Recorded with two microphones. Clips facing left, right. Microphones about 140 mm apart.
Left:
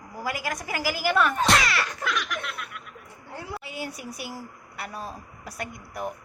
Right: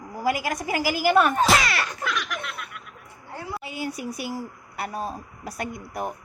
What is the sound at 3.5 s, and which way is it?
Speech, 20° right (ahead or behind).